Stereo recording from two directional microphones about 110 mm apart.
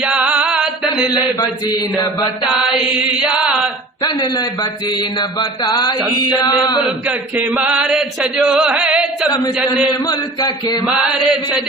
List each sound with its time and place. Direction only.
0.0 s music: 10° right (ahead or behind)
1.4 s a man's voice: 40° left (ahead or behind)
2.6 s chant: 10° right (ahead or behind)
4.0 s a man's voice: 35° left (ahead or behind)
7.0 s chant: 15° right (ahead or behind)
10.0 s a man's voice: 35° left (ahead or behind)
10.8 s chant: 5° right (ahead or behind)